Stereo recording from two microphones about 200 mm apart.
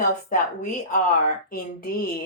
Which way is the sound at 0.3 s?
45° left (ahead or behind).